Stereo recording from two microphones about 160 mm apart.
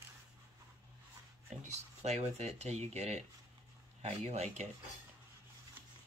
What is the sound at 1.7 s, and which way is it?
Speech, 45° right (ahead or behind).